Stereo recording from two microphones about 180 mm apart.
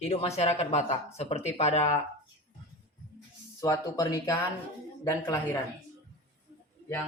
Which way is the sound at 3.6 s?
20° left (ahead or behind).